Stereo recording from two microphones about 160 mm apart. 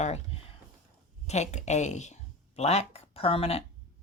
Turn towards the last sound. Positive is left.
turn(degrees=35)  # may be behind; listen again after turning